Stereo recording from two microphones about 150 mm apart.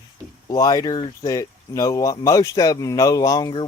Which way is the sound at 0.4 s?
25° left (ahead or behind).